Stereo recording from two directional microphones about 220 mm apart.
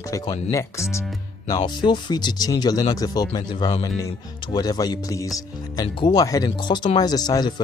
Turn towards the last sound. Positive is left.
turn(degrees=20)  # may be behind; listen again after turning